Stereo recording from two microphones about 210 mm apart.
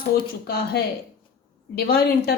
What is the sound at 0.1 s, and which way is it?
A woman's voice, 50° left (ahead or behind).